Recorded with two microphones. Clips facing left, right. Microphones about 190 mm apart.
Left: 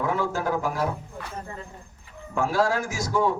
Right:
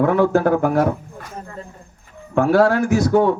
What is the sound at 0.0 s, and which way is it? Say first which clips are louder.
Speech: right 11 dB; 60° right (ahead or behind).